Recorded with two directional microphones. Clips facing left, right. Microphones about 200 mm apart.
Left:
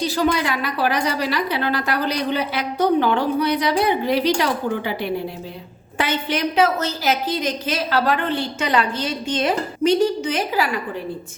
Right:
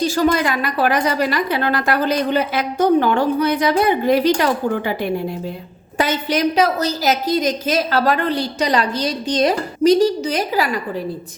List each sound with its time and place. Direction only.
0.0 s a woman's voice: 45° right (ahead or behind)